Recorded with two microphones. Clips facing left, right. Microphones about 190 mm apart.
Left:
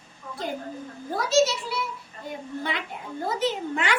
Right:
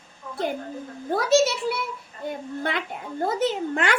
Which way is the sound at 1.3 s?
60° right (ahead or behind).